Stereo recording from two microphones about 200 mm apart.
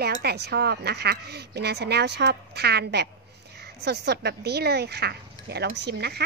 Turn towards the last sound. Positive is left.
turn(degrees=-55)  # may be behind; listen again after turning